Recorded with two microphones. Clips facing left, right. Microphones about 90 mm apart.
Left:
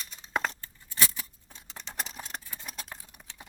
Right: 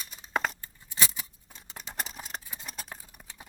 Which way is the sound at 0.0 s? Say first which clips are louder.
Right 1 dB; 5° right (ahead or behind).